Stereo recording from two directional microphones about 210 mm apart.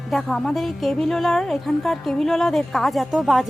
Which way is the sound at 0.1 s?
Centre (ahead or behind).